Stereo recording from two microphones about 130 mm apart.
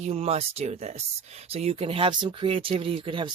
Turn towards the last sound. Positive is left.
turn(degrees=-40)  # may be behind; listen again after turning